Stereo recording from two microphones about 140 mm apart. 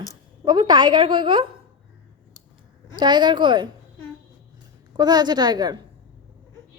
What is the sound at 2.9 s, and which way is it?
Speech, 30° right (ahead or behind).